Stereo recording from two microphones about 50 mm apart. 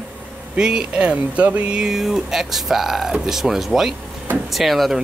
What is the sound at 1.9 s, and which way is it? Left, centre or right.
Speech, centre.